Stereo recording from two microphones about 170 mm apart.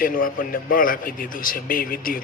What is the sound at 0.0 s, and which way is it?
A man's voice, 55° left (ahead or behind).